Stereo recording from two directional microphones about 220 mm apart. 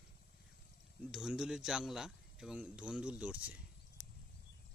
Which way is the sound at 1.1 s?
Centre (ahead or behind).